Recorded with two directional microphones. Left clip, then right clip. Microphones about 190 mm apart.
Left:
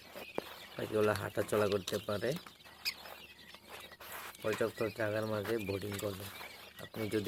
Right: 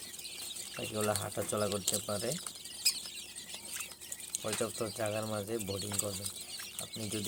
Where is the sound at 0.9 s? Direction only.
15° left (ahead or behind).